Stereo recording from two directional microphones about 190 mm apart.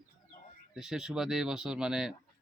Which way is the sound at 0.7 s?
5° right (ahead or behind).